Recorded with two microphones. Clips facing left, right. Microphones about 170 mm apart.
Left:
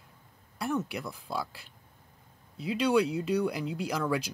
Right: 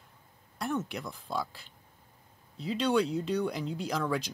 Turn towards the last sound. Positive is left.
turn(degrees=5)  # may be behind; listen again after turning